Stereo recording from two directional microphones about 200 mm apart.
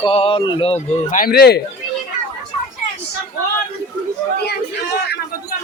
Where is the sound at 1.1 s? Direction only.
50° left (ahead or behind).